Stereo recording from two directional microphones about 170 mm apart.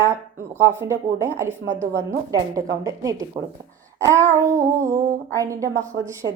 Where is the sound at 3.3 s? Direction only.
40° right (ahead or behind).